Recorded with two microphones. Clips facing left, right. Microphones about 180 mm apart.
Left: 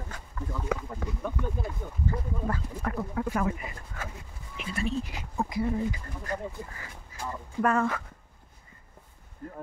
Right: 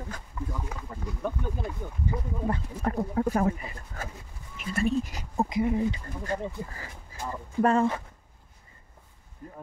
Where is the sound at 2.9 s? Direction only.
35° right (ahead or behind).